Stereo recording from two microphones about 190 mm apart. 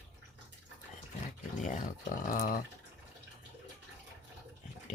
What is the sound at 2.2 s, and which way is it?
Speech, 50° left (ahead or behind).